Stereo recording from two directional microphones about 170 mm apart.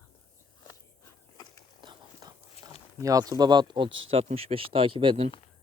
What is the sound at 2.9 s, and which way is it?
Speech, 20° right (ahead or behind).